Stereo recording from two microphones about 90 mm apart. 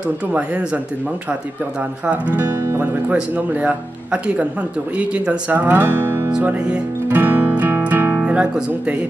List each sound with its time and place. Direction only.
0.3 s speech: 15° right (ahead or behind)
2.0 s speech: 15° right (ahead or behind)
6.4 s music: 15° right (ahead or behind)